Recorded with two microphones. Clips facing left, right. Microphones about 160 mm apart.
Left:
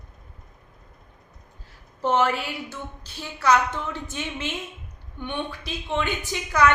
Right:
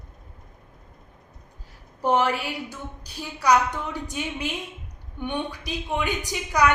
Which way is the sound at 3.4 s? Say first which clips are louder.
Even; 15° right (ahead or behind).